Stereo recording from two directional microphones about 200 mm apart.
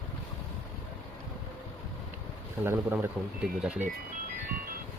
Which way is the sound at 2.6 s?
10° right (ahead or behind).